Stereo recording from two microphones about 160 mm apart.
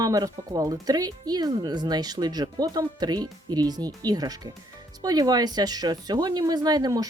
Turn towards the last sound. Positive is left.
turn(degrees=-25)  # may be behind; listen again after turning